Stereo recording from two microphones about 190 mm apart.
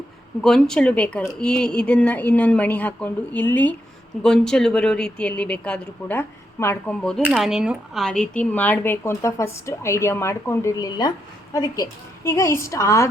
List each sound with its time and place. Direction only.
0.4 s speech: 5° left (ahead or behind)
7.3 s speech: centre (ahead or behind); by 13.1 s 15° left (ahead or behind)